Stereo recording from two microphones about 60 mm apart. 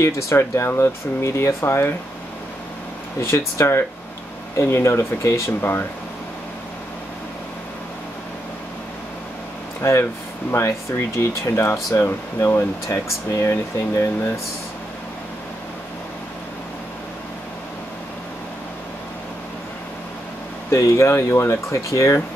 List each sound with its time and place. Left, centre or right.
0.0 s speech: left
3.2 s speech: left
5.6 s speech: left
9.8 s speech: left
20.7 s speech: left